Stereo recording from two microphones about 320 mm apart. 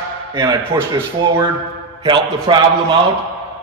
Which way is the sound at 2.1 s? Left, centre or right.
Centre.